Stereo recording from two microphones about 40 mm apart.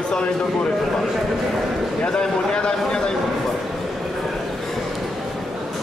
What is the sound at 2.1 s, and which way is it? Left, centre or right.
A man's voice, centre.